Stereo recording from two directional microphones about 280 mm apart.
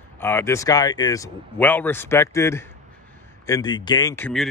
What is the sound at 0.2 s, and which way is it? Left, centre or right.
Speech, centre.